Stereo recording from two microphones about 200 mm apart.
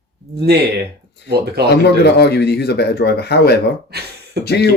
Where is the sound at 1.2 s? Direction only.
55° right (ahead or behind).